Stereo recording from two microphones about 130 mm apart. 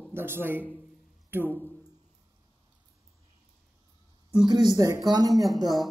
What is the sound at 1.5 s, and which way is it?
Speech, 15° left (ahead or behind).